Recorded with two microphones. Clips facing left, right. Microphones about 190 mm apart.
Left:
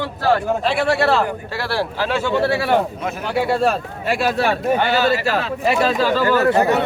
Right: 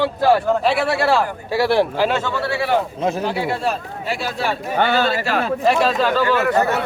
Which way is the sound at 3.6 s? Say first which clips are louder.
Left 4 dB; 60° left (ahead or behind).